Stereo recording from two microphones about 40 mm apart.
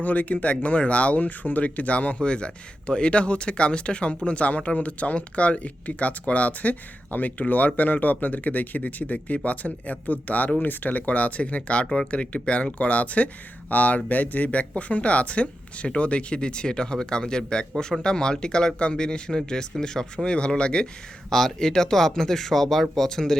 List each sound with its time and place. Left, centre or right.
0.0 s speech: left
21.2 s speech: centre